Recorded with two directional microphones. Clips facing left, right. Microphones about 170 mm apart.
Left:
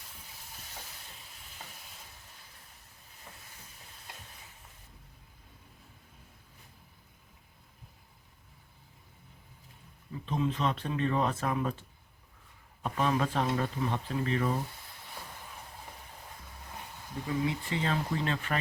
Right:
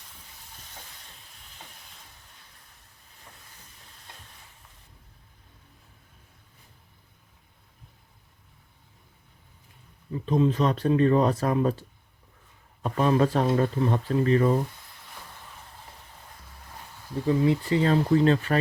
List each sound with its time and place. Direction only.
10.2 s speech: 40° right (ahead or behind)
17.4 s speech: 35° right (ahead or behind)